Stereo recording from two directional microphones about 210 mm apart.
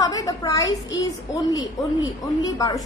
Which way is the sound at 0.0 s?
15° left (ahead or behind).